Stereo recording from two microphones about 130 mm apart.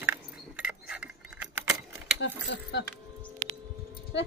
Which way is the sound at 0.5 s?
10° right (ahead or behind).